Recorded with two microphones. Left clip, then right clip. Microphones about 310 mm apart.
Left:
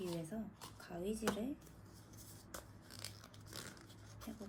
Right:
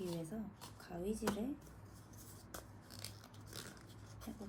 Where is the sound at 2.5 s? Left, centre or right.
Centre.